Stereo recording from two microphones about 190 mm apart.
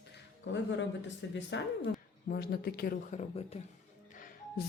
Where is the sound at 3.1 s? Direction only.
35° left (ahead or behind).